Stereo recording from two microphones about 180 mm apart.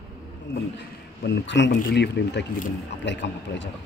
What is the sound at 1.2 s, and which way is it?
Speech, 75° left (ahead or behind).